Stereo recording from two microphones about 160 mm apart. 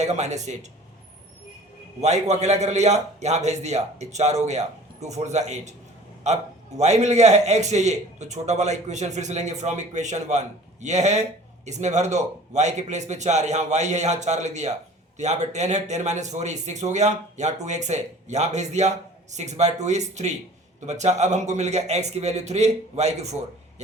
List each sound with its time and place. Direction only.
0.0 s a man's voice: 45° right (ahead or behind)
2.0 s a man's voice: 45° right (ahead or behind)